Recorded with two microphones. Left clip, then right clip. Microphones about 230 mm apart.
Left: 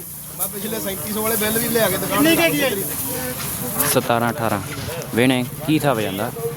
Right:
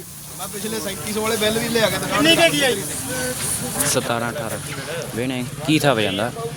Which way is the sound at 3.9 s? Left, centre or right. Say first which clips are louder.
Left 4 dB; centre.